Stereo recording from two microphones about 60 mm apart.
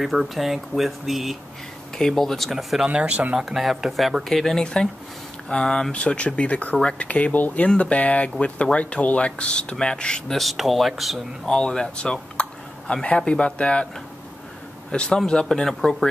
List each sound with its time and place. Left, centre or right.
0.0 s speech: centre
2.9 s speech: centre
3.3 s speech: centre
5.5 s speech: centre
11.4 s speech: centre
14.9 s speech: centre